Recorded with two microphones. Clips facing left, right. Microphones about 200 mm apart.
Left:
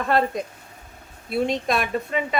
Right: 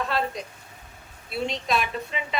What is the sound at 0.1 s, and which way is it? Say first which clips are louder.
A woman's voice: left 6 dB; 50° left (ahead or behind).